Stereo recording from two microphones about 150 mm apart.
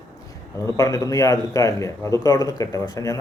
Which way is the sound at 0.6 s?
20° left (ahead or behind).